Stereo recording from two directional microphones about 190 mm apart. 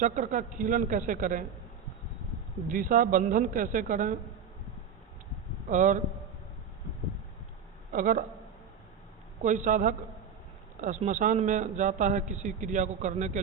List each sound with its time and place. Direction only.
0.0 s a man's voice: 40° right (ahead or behind)
2.6 s a man's voice: 45° right (ahead or behind)
5.6 s a man's voice: 40° right (ahead or behind)
7.9 s a man's voice: 45° right (ahead or behind)
9.4 s a man's voice: 40° right (ahead or behind)